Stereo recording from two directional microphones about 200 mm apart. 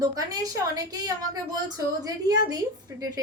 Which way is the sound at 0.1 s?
20° right (ahead or behind).